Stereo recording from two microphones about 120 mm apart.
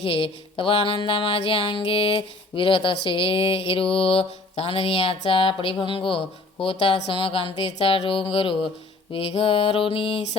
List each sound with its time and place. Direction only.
0.0 s music: 50° left (ahead or behind)